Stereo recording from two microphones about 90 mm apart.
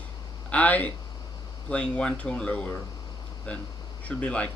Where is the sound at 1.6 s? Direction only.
10° left (ahead or behind).